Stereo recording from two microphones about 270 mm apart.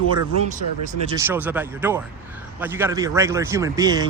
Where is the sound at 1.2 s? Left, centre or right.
Centre.